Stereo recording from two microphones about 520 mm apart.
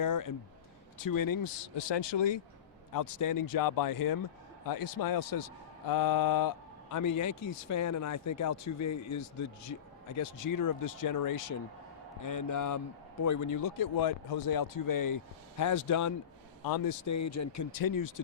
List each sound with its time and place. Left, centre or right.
0.0 s speech: left
1.9 s speech: left
2.9 s speech: left